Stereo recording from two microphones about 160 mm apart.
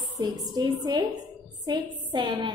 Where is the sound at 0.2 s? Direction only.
25° right (ahead or behind).